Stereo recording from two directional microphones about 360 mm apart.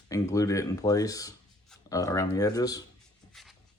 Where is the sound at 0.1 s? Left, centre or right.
Centre.